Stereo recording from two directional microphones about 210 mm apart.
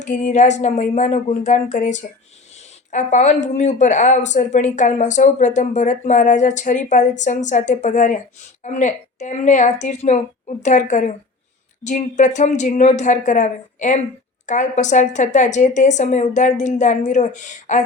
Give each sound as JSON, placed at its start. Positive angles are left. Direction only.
{"t": 0.0, "sound": "speech", "side_deg": 35}